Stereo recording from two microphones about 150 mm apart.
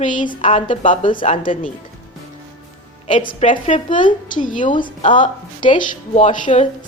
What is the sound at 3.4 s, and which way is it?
A woman's voice, 45° left (ahead or behind).